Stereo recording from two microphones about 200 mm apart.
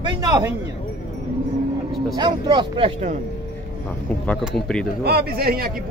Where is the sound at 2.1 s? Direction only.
20° right (ahead or behind).